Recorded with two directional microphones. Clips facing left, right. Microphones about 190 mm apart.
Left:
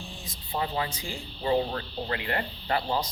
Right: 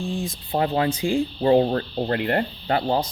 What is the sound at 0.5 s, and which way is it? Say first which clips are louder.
Speech: right 8 dB; 55° right (ahead or behind).